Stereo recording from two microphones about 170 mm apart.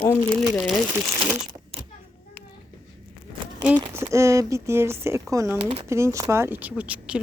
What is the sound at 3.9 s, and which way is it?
Speech, 15° right (ahead or behind).